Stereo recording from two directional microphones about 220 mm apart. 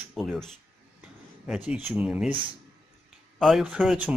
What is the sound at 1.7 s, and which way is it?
Speech, 5° right (ahead or behind).